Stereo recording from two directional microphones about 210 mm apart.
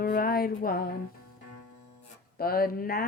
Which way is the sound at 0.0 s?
45° left (ahead or behind).